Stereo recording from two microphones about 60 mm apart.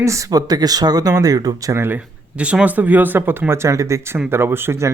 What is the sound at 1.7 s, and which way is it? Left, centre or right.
Speech, right.